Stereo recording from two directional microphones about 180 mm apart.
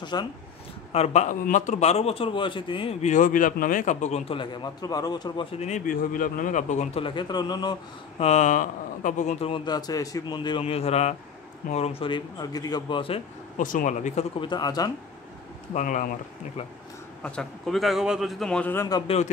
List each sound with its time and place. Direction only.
0.0 s speech: 25° left (ahead or behind)
0.9 s a man's voice: 40° left (ahead or behind); by 5.5 s 25° left (ahead or behind)
5.6 s a man's voice: 45° left (ahead or behind); by 7.7 s 25° left (ahead or behind)
8.2 s a man's voice: 40° left (ahead or behind)
13.6 s speech: 45° left (ahead or behind)
14.4 s speech: 25° left (ahead or behind)
15.7 s speech: 45° left (ahead or behind)
17.2 s a man's voice: centre (ahead or behind); by 19.0 s 15° left (ahead or behind)
19.0 s a man's voice: 35° left (ahead or behind)